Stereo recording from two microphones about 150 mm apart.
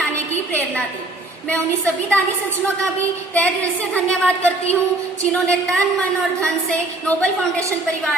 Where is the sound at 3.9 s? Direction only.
5° left (ahead or behind).